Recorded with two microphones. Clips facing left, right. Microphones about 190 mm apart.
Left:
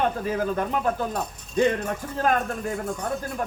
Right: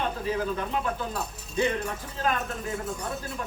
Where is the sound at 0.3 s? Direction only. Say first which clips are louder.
Left 3 dB; 50° left (ahead or behind).